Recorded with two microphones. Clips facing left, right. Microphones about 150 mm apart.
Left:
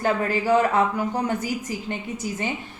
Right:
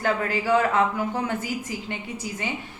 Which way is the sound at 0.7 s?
15° left (ahead or behind).